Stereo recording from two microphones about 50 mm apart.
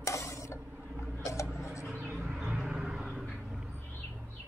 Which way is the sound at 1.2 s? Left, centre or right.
Left.